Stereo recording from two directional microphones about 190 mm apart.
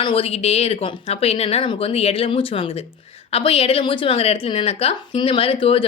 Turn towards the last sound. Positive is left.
turn(degrees=30)  # may be behind; listen again after turning